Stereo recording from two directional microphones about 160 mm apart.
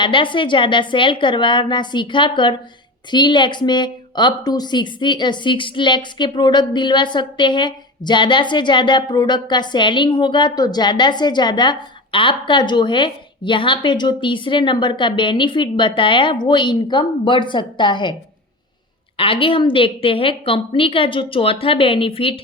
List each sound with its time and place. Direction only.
0.0 s a woman's voice: 30° left (ahead or behind)